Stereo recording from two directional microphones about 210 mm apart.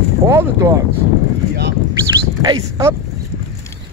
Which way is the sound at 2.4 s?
20° right (ahead or behind).